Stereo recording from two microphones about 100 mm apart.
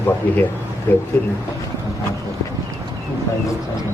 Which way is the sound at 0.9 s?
20° left (ahead or behind).